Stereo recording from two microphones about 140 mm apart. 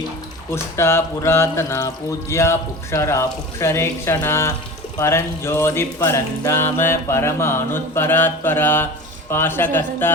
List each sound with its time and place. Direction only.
0.5 s speech: 20° left (ahead or behind)
4.9 s music: 20° left (ahead or behind)